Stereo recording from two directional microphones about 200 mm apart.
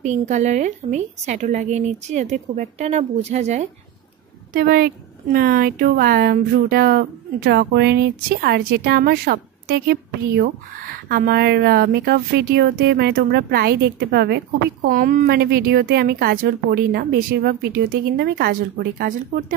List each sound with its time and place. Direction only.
0.0 s a woman's voice: 35° right (ahead or behind)
4.6 s a woman's voice: 45° right (ahead or behind)